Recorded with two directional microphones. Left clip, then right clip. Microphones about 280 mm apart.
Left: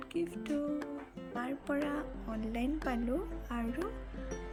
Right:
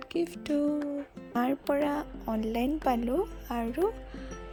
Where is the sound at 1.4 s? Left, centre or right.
Right.